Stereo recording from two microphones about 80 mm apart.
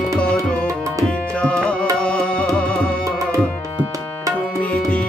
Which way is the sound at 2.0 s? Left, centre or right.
Centre.